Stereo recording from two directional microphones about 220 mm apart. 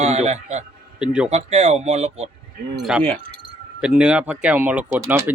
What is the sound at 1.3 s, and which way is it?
Speech, 30° right (ahead or behind).